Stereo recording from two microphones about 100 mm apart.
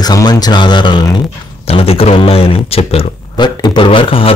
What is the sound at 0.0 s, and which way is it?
Speech, 40° left (ahead or behind).